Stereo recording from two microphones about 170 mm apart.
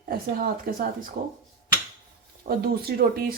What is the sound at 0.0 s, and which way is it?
Speech, 55° right (ahead or behind).